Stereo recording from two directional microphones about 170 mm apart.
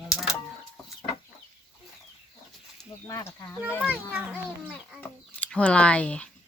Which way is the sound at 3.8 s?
10° right (ahead or behind).